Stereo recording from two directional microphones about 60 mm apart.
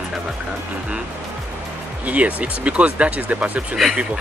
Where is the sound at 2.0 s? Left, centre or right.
Right.